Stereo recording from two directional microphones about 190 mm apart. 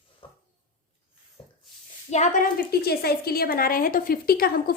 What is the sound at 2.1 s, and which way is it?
Speech, 40° left (ahead or behind).